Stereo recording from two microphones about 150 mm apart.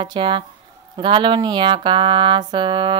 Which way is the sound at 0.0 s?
35° right (ahead or behind).